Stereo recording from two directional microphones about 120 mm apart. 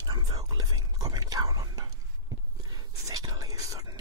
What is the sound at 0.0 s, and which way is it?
Whispering, 30° right (ahead or behind).